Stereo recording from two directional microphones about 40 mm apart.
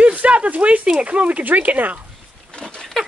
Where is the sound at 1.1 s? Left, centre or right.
Right.